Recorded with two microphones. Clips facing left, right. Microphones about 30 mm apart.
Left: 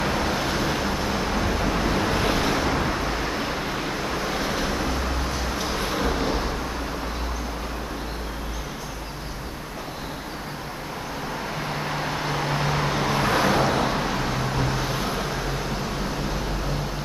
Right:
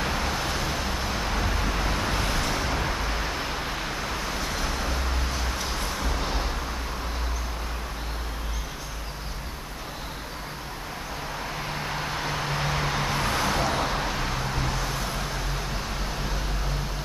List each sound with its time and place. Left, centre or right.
0.0 s vehicle: centre
6.2 s vehicle: centre
11.7 s vehicle: centre